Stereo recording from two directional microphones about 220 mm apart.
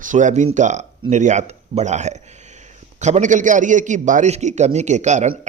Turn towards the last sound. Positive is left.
turn(degrees=-30)  # may be behind; listen again after turning